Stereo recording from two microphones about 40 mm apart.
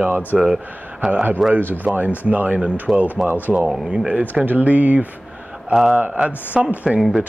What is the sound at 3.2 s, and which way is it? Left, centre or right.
Speech, right.